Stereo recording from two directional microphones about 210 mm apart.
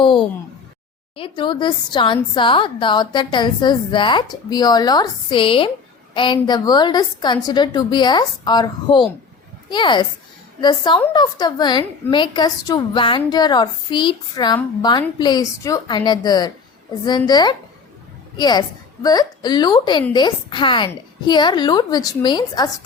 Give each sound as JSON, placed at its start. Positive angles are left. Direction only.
{"t": 1.1, "sound": "a woman's voice", "side_deg": 25}